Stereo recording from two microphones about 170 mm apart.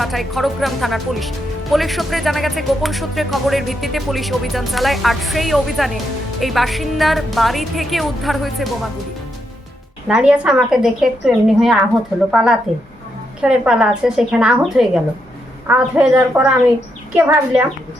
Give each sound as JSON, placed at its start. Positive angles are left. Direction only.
{"t": 0.0, "sound": "speech", "side_deg": 0}
{"t": 10.1, "sound": "a woman's voice", "side_deg": -5}